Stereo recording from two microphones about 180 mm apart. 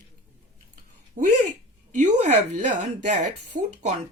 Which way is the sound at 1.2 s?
45° right (ahead or behind).